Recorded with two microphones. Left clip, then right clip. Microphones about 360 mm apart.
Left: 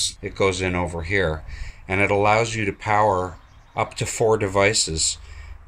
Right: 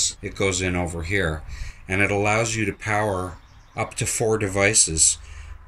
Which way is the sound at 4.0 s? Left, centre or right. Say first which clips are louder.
Left 3 dB; left.